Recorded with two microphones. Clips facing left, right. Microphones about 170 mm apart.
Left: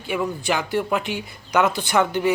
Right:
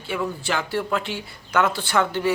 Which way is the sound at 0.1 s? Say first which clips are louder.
Left 2 dB; 15° left (ahead or behind).